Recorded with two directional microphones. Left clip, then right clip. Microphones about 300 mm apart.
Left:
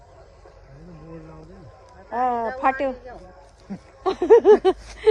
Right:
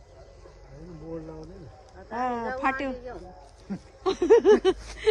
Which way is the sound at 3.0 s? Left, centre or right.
Centre.